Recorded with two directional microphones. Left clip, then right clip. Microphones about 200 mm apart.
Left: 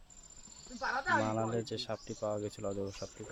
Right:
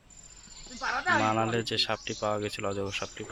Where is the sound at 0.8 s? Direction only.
30° right (ahead or behind).